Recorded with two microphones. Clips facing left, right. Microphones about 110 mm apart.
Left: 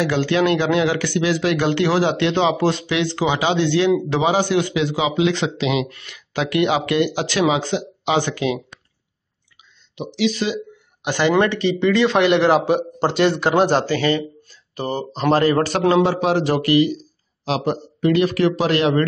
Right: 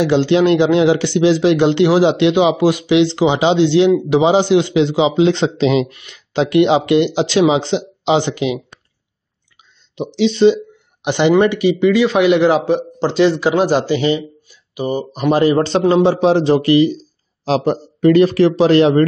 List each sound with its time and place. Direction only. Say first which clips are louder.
0.0 s speech: right 5 dB; 20° right (ahead or behind)
9.9 s a man's voice: right 6 dB; 30° right (ahead or behind); by 13.8 s 5° right (ahead or behind)
13.8 s speech: right 3 dB; 15° right (ahead or behind)